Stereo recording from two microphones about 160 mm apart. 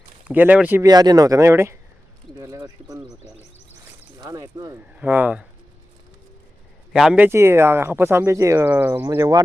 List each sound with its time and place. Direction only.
0.3 s speech: 10° right (ahead or behind)
0.8 s speech: 25° right (ahead or behind)
3.1 s speech: 5° right (ahead or behind)
4.2 s speech: 25° right (ahead or behind)
4.9 s speech: 10° right (ahead or behind)
6.9 s speech: 5° right (ahead or behind); by 9.4 s 25° right (ahead or behind)